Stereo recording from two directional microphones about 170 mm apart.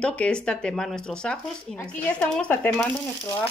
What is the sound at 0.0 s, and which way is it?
Speech, 5° left (ahead or behind).